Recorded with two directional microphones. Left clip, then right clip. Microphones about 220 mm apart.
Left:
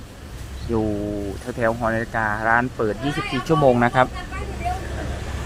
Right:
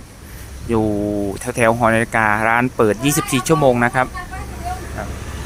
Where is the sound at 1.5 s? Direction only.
15° right (ahead or behind).